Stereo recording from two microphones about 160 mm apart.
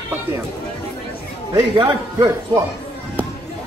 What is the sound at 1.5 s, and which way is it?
Speech, 25° right (ahead or behind).